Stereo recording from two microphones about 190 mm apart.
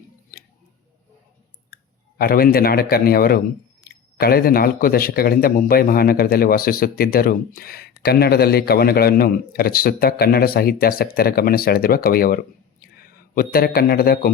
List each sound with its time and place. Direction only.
1.7 s speech: 50° left (ahead or behind)